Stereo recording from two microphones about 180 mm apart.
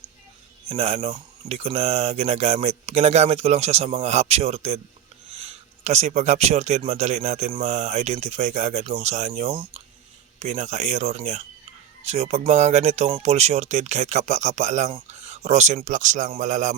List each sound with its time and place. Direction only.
0.7 s speech: 35° right (ahead or behind)